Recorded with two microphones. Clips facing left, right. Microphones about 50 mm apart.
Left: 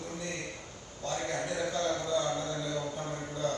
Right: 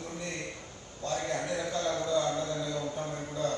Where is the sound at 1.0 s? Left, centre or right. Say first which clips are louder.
Right 2 dB; left.